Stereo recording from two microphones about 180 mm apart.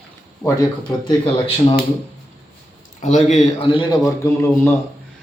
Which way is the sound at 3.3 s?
40° left (ahead or behind).